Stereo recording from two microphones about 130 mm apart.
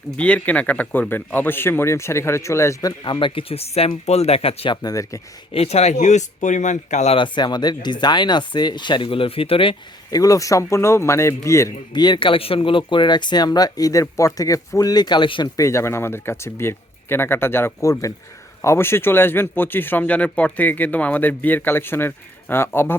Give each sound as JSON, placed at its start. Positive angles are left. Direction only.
{"t": 0.2, "sound": "a man's voice", "side_deg": 10}
{"t": 3.0, "sound": "speech", "side_deg": 40}
{"t": 4.8, "sound": "speech", "side_deg": 25}
{"t": 5.5, "sound": "speech", "side_deg": 55}
{"t": 7.2, "sound": "speech", "side_deg": 35}
{"t": 10.1, "sound": "speech", "side_deg": 25}
{"t": 11.9, "sound": "speech", "side_deg": 35}
{"t": 15.5, "sound": "a man's voice", "side_deg": 25}